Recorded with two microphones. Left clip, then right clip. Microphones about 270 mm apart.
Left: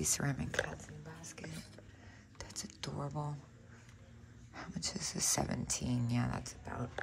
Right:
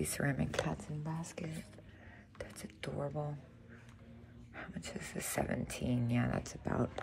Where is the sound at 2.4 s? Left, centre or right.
Centre.